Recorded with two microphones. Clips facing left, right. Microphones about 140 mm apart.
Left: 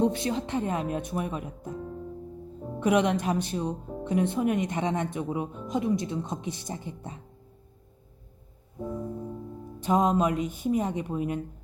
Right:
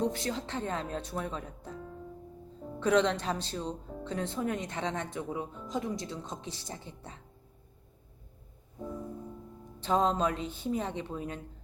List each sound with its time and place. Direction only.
0.0 s speech: 20° left (ahead or behind)
9.8 s speech: 15° left (ahead or behind)